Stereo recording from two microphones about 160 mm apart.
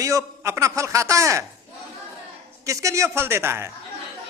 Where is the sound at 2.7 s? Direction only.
20° right (ahead or behind).